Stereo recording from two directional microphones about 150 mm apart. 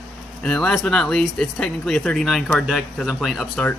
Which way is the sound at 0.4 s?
5° left (ahead or behind).